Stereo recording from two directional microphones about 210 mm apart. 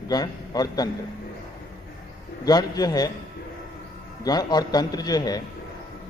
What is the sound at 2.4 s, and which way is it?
Speech, 20° left (ahead or behind).